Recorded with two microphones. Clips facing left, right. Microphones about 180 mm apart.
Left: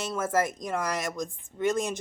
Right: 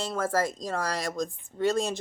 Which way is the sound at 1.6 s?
15° left (ahead or behind).